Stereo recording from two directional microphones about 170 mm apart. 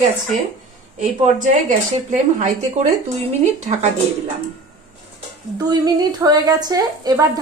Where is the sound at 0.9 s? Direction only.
45° right (ahead or behind).